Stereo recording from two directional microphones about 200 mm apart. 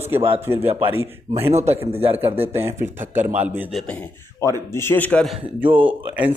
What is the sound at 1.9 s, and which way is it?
Speech, 30° right (ahead or behind).